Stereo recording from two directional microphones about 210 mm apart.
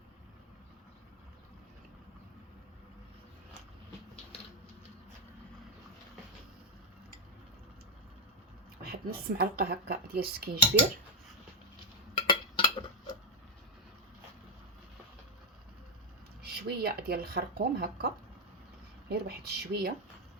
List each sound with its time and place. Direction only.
8.8 s speech: 45° right (ahead or behind)
12.1 s cutlery: 25° left (ahead or behind)
16.4 s speech: 50° right (ahead or behind)